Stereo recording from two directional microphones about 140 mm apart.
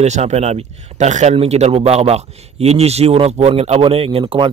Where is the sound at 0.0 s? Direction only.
50° right (ahead or behind).